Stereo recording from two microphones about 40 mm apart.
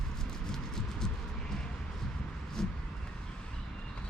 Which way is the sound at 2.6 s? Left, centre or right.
Centre.